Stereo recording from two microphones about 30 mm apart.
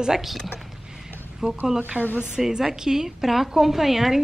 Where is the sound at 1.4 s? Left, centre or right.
Right.